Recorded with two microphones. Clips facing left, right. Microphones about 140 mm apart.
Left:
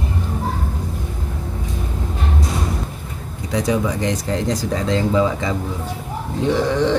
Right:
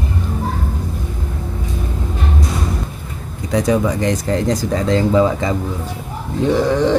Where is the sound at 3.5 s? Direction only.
50° right (ahead or behind).